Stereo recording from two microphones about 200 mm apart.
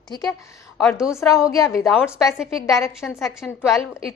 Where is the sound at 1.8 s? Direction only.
5° right (ahead or behind).